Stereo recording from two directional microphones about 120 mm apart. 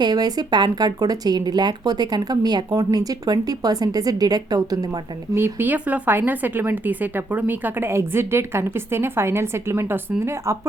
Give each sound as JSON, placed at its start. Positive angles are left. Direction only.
{"t": 0.0, "sound": "speech", "side_deg": -35}
{"t": 5.3, "sound": "speech", "side_deg": -20}